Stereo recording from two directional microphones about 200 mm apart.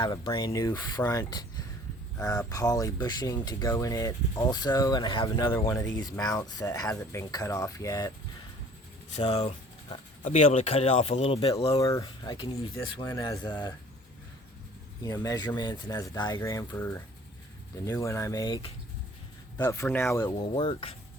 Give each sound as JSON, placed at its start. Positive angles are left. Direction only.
{"t": 0.0, "sound": "speech", "side_deg": 20}
{"t": 5.5, "sound": "speech", "side_deg": 15}
{"t": 9.1, "sound": "speech", "side_deg": 25}
{"t": 11.8, "sound": "speech", "side_deg": 15}
{"t": 15.0, "sound": "speech", "side_deg": 20}